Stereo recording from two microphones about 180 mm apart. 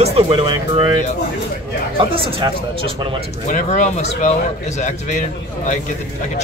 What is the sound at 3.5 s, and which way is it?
Speech, 40° left (ahead or behind).